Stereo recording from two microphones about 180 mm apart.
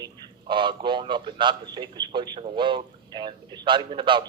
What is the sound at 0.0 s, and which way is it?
A man's voice, 25° right (ahead or behind).